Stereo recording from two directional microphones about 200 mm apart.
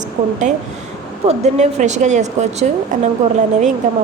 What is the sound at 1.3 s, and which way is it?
A woman's voice, 35° right (ahead or behind).